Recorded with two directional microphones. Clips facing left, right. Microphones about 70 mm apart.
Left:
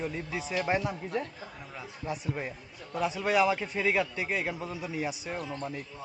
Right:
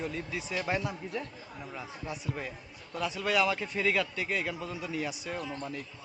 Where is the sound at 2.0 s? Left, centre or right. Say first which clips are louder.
Left 4 dB; left.